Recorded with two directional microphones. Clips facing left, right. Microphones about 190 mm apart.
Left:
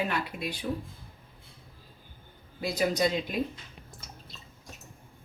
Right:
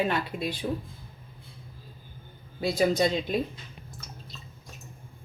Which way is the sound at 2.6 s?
30° right (ahead or behind).